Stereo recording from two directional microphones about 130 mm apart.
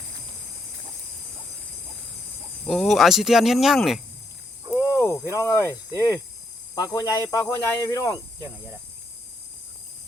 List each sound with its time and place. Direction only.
2.6 s speech: centre (ahead or behind)
4.9 s a sound: 20° left (ahead or behind)
5.3 s speech: 25° left (ahead or behind)